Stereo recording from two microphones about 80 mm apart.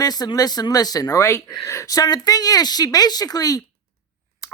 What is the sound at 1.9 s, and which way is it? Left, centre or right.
A woman's voice, left.